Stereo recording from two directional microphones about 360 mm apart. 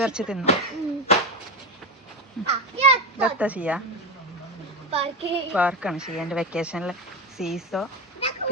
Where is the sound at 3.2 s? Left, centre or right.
Centre.